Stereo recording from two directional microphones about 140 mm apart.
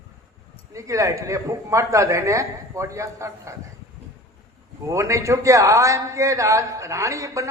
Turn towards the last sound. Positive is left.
turn(degrees=-20)  # may be behind; listen again after turning